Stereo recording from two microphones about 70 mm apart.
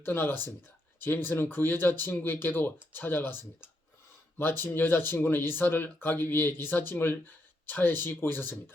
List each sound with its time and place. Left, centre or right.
0.0 s speech: left